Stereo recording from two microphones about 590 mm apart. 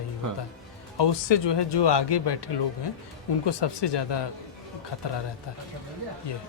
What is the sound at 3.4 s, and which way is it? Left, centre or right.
Speech, left.